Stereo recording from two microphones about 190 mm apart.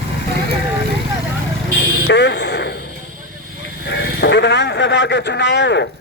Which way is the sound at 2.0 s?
65° left (ahead or behind).